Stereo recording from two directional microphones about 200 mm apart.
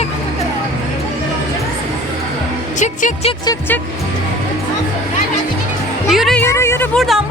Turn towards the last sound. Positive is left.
turn(degrees=0)  # may be behind; listen again after turning